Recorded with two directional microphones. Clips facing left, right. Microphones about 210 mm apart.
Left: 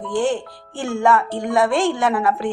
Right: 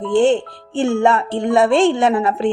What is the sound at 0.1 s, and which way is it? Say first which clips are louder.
A woman's voice: right 6 dB; 25° right (ahead or behind).